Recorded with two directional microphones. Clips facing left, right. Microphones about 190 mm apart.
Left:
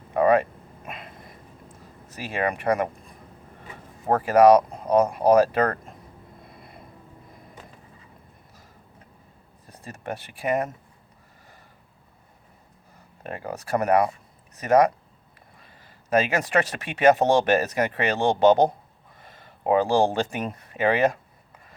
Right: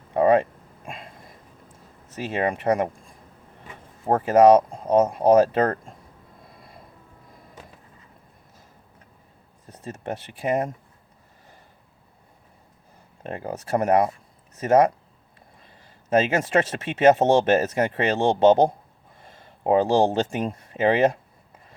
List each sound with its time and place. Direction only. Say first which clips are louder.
0.1 s a sound: right 1 dB; 25° right (ahead or behind)
2.0 s speech: right 2 dB; 25° right (ahead or behind)
4.2 s speech: right 1 dB; 25° right (ahead or behind)
9.8 s speech: right 2 dB; 25° right (ahead or behind)
13.2 s speech: right 2 dB; 25° right (ahead or behind)